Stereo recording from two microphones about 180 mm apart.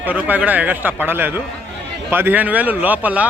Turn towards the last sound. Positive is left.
turn(degrees=-10)  # may be behind; listen again after turning